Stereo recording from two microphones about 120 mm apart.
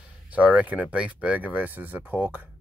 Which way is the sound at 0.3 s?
10° right (ahead or behind).